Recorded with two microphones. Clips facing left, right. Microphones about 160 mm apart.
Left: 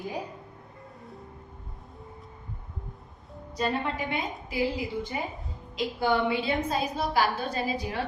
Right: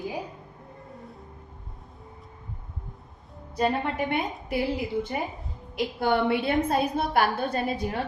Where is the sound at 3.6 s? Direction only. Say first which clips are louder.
Right 3 dB; 55° right (ahead or behind).